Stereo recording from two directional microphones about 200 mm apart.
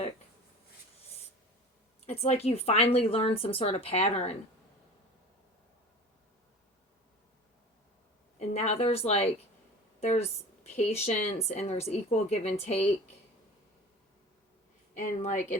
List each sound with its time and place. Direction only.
2.0 s speech: 30° left (ahead or behind)
8.4 s speech: 35° left (ahead or behind)
14.9 s speech: 35° left (ahead or behind)